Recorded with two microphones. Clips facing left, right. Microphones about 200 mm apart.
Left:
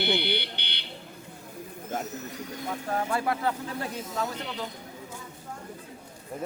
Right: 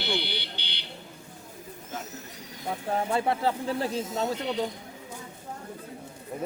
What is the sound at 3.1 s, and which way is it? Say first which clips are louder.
Speech: right 3 dB; 25° right (ahead or behind).